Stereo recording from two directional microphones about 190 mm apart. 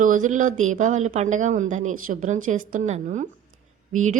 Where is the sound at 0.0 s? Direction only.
45° right (ahead or behind).